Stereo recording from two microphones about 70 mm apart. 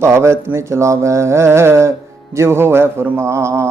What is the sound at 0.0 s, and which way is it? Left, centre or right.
A man's voice, right.